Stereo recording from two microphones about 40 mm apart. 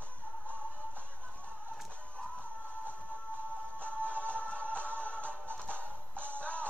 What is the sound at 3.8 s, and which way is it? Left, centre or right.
Music, left.